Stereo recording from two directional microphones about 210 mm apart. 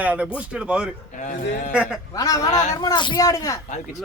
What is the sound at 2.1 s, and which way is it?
A man's voice, 15° left (ahead or behind).